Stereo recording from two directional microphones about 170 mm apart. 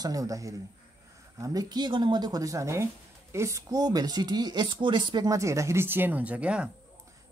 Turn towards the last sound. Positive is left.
turn(degrees=-5)  # may be behind; listen again after turning